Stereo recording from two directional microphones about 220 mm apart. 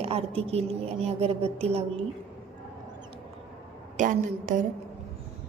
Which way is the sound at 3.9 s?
35° right (ahead or behind).